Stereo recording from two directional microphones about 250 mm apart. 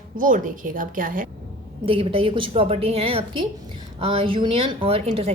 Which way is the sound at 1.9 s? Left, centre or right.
Right.